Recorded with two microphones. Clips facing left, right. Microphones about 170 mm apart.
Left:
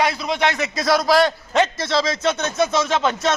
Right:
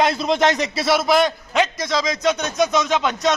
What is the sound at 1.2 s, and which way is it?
A man's voice, 15° right (ahead or behind).